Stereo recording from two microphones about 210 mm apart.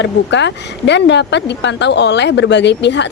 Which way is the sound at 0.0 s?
55° left (ahead or behind).